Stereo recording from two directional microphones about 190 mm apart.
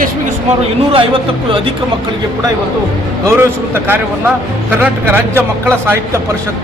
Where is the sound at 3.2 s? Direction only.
10° right (ahead or behind).